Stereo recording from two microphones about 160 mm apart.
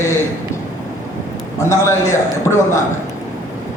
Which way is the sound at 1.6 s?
20° left (ahead or behind).